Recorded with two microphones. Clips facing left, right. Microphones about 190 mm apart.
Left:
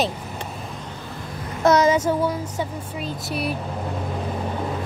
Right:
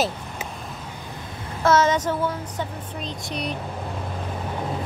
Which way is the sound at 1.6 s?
15° left (ahead or behind).